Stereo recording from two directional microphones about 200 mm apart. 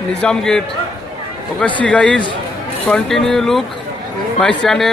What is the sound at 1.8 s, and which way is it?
A man's voice, 5° left (ahead or behind).